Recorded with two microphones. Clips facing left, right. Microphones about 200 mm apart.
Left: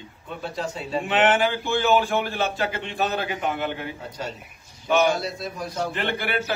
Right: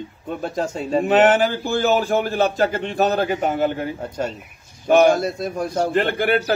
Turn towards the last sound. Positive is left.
turn(degrees=-45)  # may be behind; listen again after turning